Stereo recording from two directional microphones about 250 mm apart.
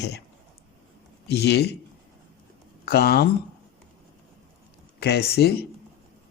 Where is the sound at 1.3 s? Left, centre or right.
Left.